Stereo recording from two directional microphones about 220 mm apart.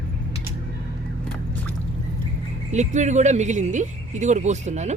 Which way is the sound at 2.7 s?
30° right (ahead or behind).